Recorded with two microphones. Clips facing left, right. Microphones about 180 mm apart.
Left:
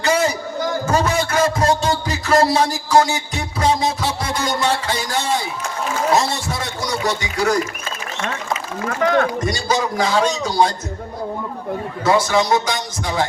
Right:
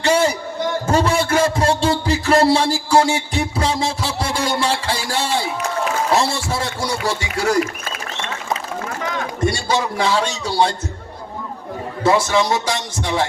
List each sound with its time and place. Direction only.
0.0 s a man's voice: 30° right (ahead or behind)
9.0 s speech: 65° left (ahead or behind)
9.5 s speech: 30° right (ahead or behind)
12.0 s a man's voice: 30° right (ahead or behind)